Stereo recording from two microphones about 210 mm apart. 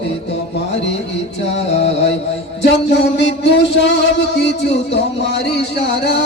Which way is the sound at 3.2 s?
60° left (ahead or behind).